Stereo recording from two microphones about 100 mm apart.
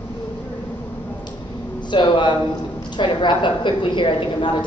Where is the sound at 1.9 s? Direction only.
50° left (ahead or behind).